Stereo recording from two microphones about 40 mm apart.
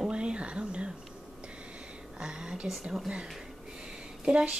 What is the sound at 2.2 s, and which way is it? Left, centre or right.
Speech, right.